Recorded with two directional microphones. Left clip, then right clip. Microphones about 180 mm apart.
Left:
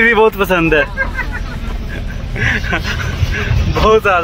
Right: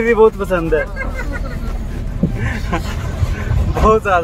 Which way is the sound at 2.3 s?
5° left (ahead or behind).